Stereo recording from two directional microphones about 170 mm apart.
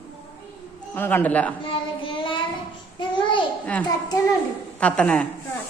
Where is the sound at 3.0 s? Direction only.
25° left (ahead or behind).